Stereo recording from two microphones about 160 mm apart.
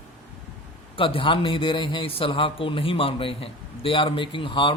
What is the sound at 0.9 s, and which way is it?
Speech, 35° left (ahead or behind).